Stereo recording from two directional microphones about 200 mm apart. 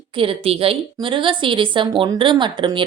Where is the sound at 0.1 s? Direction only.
25° right (ahead or behind).